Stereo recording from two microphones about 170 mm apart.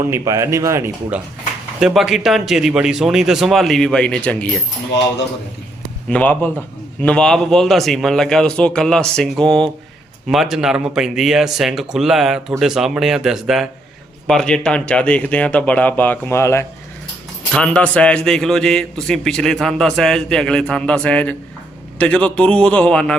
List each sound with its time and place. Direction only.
0.0 s speech: 15° right (ahead or behind)
1.8 s a man's voice: centre (ahead or behind)
6.1 s a man's voice: 10° left (ahead or behind)